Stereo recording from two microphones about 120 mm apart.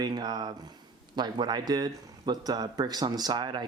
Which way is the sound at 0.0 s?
35° right (ahead or behind).